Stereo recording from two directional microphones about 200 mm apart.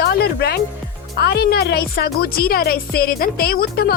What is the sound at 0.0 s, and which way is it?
Music, 55° left (ahead or behind).